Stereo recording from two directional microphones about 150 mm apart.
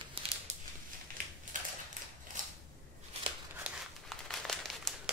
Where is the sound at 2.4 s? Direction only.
55° right (ahead or behind).